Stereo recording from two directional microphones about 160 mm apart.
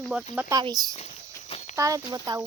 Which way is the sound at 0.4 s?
25° right (ahead or behind).